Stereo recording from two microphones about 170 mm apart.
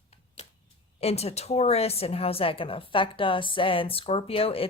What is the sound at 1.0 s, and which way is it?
A woman's voice, 35° left (ahead or behind).